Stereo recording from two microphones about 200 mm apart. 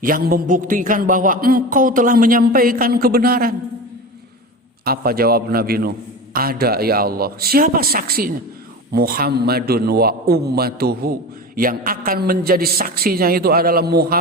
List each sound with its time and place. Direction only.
0.0 s a man's voice: 45° right (ahead or behind)
4.9 s a man's voice: 50° right (ahead or behind)